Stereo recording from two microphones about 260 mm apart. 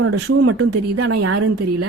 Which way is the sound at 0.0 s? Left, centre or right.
Right.